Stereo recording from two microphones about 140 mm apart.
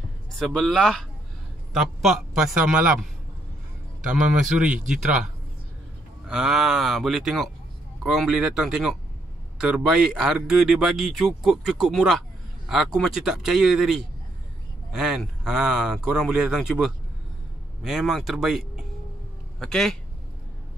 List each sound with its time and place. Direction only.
0.4 s speech: 5° left (ahead or behind)
4.1 s a man's voice: 5° right (ahead or behind)
6.2 s speech: 5° right (ahead or behind)